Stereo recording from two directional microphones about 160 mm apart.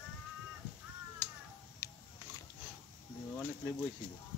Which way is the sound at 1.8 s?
20° left (ahead or behind).